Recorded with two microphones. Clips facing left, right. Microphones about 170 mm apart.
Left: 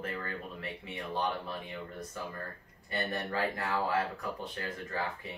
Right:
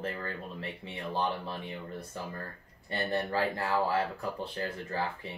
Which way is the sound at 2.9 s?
30° right (ahead or behind).